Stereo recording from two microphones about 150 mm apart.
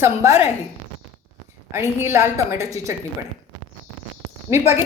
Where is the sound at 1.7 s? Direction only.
15° right (ahead or behind).